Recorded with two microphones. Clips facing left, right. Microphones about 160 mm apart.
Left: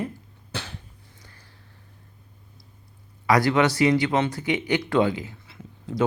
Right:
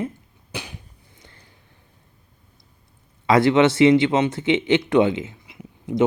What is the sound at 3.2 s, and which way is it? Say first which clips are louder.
Speech: right 4 dB; 25° right (ahead or behind).